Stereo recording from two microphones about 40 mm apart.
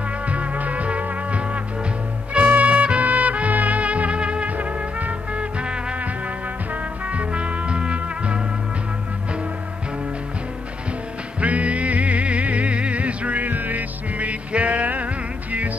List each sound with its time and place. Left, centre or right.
0.3 s music: right
4.5 s music: right
11.4 s music: right